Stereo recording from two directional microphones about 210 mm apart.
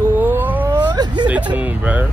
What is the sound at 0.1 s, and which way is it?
Cat, 10° right (ahead or behind).